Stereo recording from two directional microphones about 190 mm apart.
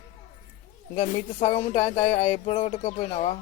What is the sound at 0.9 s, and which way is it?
Speech, 35° left (ahead or behind).